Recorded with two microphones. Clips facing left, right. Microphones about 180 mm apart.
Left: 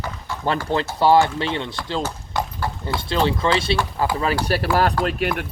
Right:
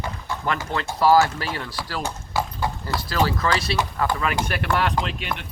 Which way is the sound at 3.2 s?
25° left (ahead or behind).